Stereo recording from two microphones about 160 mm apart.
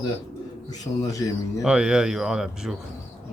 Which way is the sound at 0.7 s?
20° left (ahead or behind).